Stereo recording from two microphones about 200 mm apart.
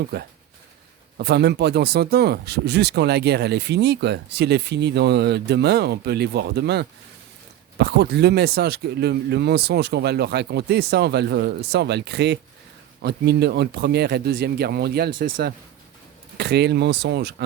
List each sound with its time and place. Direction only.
0.1 s speech: 55° right (ahead or behind)